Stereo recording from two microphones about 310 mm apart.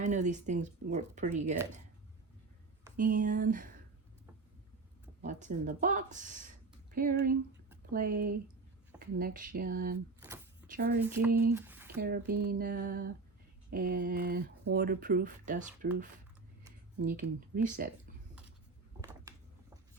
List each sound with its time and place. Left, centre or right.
0.0 s speech: right
3.0 s speech: right
5.2 s speech: right
10.2 s a sound: centre
10.8 s speech: right
11.0 s a sound: centre
11.5 s squish: centre
11.9 s speech: right
17.0 s speech: right